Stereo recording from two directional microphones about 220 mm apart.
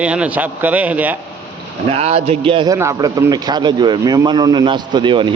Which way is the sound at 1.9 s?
30° right (ahead or behind).